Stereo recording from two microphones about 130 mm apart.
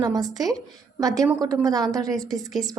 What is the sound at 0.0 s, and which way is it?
A woman's voice, 30° right (ahead or behind).